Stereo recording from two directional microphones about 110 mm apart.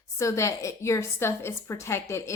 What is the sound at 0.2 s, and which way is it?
A woman's voice, 25° left (ahead or behind).